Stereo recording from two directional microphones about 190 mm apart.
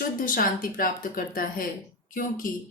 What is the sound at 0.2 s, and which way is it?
Speech, 50° left (ahead or behind).